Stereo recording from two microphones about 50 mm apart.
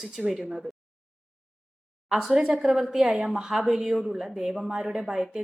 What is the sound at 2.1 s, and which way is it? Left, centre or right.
A woman's voice, centre.